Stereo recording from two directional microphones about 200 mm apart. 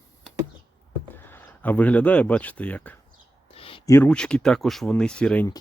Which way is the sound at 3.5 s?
30° left (ahead or behind).